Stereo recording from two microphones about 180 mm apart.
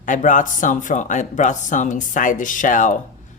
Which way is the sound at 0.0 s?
45° left (ahead or behind).